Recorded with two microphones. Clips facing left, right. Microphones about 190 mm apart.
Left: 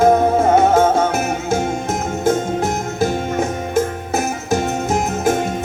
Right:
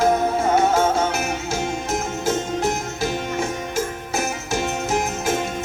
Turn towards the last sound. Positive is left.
turn(degrees=50)  # may be behind; listen again after turning